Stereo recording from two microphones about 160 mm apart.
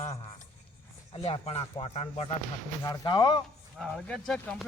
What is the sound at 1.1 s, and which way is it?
A man's voice, 35° left (ahead or behind).